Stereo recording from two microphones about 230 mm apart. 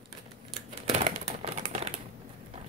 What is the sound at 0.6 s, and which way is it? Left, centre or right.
Typewriter, right.